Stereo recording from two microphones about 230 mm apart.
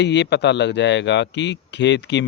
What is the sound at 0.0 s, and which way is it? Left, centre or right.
Speech, left.